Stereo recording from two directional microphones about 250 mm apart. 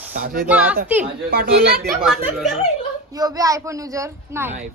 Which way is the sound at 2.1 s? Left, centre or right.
Centre.